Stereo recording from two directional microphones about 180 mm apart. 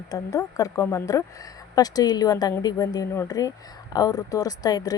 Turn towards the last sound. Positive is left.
turn(degrees=20)  # may be behind; listen again after turning